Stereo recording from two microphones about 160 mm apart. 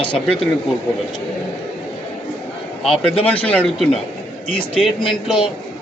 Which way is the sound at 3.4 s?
5° left (ahead or behind).